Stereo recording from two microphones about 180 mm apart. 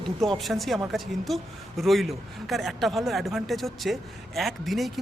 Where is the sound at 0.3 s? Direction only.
Centre (ahead or behind).